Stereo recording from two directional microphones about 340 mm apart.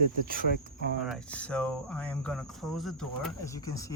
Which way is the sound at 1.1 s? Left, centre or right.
Centre.